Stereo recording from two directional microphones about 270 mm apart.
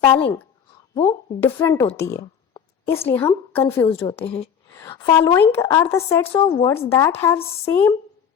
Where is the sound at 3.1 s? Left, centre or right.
Centre.